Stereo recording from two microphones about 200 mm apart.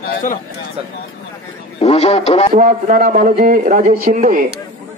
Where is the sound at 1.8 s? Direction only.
30° left (ahead or behind).